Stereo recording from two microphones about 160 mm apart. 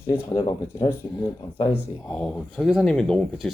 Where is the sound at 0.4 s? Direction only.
15° left (ahead or behind).